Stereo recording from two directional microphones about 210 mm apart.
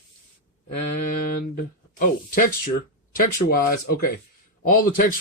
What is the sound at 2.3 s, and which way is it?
Speech, 40° left (ahead or behind).